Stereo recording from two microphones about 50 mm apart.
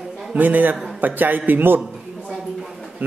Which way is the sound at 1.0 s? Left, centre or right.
Right.